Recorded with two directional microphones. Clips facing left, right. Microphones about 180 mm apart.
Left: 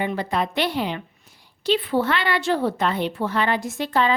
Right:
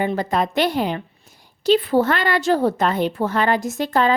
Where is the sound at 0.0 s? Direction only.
40° right (ahead or behind).